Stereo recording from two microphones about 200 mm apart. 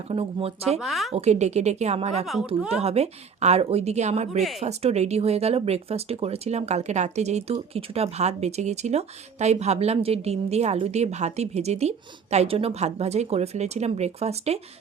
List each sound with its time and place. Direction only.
0.1 s speech: 30° right (ahead or behind)
0.8 s a woman's voice: centre (ahead or behind)
1.1 s speech: 35° right (ahead or behind)
2.2 s a woman's voice: centre (ahead or behind)
2.8 s speech: 30° right (ahead or behind)